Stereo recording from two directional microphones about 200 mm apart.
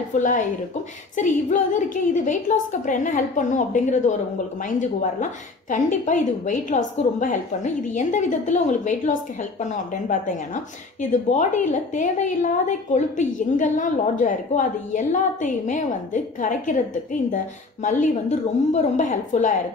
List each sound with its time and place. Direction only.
0.1 s a woman's voice: 40° left (ahead or behind)